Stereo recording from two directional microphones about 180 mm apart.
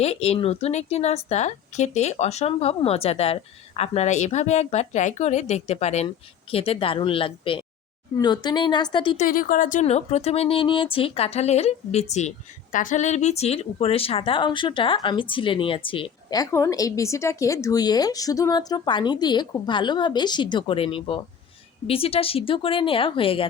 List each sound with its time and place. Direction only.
0.0 s speech: 35° left (ahead or behind)
9.1 s speech: 50° left (ahead or behind); by 23.5 s 30° left (ahead or behind)